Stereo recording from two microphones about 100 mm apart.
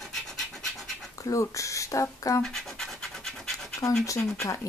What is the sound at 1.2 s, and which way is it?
A woman's voice, 30° left (ahead or behind).